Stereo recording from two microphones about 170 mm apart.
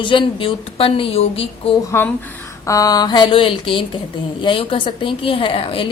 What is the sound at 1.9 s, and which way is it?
A woman's voice, 15° left (ahead or behind).